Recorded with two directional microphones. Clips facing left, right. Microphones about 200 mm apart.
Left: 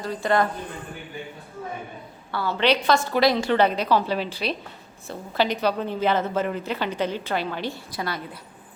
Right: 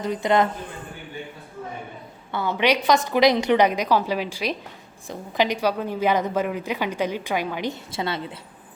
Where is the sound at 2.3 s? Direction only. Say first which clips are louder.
Even; 20° right (ahead or behind).